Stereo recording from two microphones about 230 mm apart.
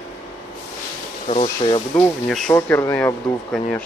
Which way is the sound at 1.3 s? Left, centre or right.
Left.